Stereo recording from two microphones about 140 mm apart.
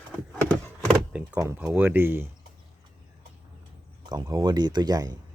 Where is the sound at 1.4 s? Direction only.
15° right (ahead or behind).